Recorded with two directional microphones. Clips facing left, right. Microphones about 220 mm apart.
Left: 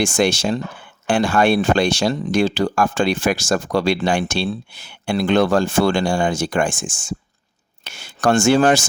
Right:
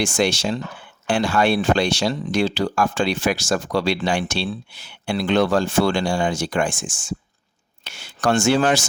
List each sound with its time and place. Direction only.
0.0 s speech: 50° left (ahead or behind)